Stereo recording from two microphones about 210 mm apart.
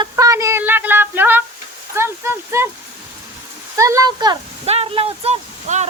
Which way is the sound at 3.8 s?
15° right (ahead or behind).